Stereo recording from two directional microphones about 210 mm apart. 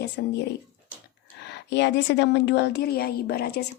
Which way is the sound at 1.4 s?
55° left (ahead or behind).